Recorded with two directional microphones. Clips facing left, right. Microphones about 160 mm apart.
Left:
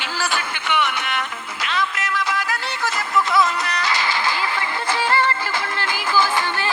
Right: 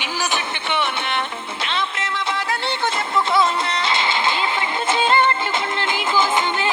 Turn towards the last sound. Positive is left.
turn(degrees=-20)  # may be behind; listen again after turning